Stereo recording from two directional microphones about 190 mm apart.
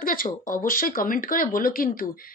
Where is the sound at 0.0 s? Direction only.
45° left (ahead or behind).